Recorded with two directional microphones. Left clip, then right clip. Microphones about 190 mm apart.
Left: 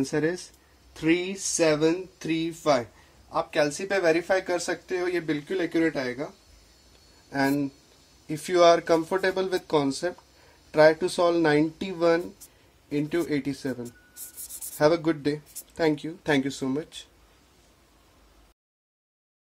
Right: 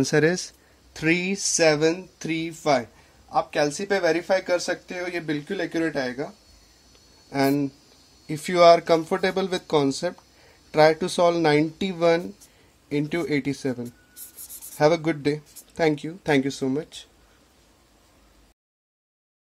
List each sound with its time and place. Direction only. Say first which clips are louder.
0.0 s speech: right 6 dB; 45° right (ahead or behind)
7.2 s speech: right 3 dB; 25° right (ahead or behind)